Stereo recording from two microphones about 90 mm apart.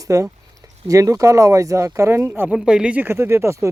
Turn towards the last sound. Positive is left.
turn(degrees=-30)  # may be behind; listen again after turning